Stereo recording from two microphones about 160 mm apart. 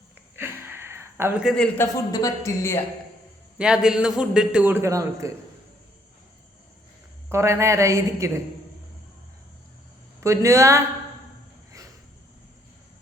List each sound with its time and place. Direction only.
0.3 s a sound: 15° right (ahead or behind); by 1.9 s 10° left (ahead or behind)
2.1 s speech: 20° left (ahead or behind)
3.6 s a man's voice: 5° right (ahead or behind)
7.3 s a woman's voice: 15° right (ahead or behind)
10.2 s speech: 20° right (ahead or behind)